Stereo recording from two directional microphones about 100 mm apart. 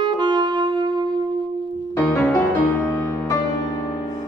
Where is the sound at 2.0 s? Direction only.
15° left (ahead or behind).